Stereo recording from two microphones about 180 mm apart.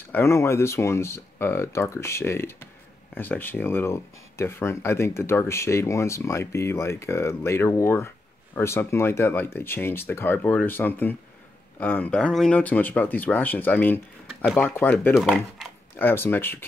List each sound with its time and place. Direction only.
0.1 s speech: 15° left (ahead or behind)
15.1 s speech: centre (ahead or behind)
16.0 s speech: 10° left (ahead or behind)